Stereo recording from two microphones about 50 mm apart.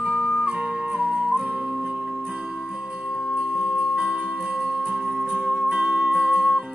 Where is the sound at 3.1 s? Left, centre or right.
Right.